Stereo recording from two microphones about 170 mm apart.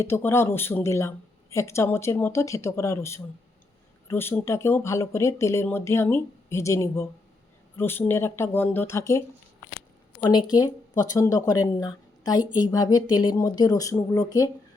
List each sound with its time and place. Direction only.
0.0 s speech: 15° left (ahead or behind)
10.2 s speech: 25° left (ahead or behind)